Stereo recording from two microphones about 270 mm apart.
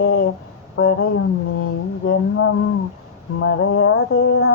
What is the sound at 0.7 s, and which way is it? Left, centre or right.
Speech, left.